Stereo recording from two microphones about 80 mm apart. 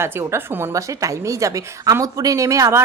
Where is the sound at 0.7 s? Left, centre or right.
Right.